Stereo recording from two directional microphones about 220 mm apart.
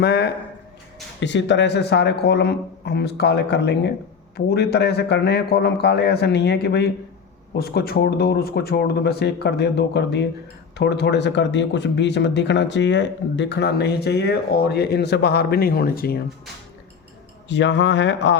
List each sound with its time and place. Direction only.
0.0 s speech: 45° left (ahead or behind)
17.5 s speech: 55° left (ahead or behind)